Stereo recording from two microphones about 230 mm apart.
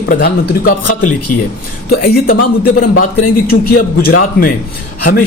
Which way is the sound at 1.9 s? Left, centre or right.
Left.